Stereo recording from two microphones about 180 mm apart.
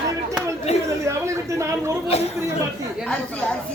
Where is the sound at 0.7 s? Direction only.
35° left (ahead or behind).